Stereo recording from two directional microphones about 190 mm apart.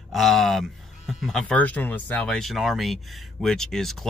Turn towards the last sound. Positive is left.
turn(degrees=0)  # may be behind; listen again after turning